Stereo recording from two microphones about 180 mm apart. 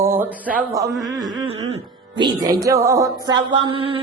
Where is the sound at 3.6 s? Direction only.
30° right (ahead or behind).